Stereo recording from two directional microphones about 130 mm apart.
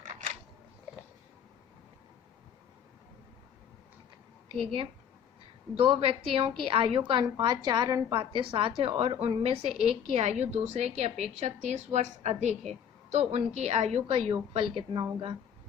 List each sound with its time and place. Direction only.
5.7 s a woman's voice: 45° right (ahead or behind); by 8.0 s 30° right (ahead or behind)
8.1 s a woman's voice: 40° right (ahead or behind)